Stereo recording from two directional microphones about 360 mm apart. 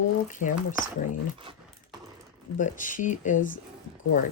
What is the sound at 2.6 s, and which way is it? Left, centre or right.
Speech, left.